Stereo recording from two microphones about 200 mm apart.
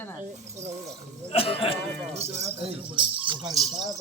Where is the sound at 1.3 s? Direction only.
30° left (ahead or behind).